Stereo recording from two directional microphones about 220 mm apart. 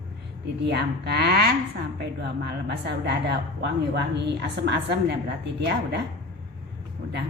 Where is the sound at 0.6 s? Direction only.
50° right (ahead or behind).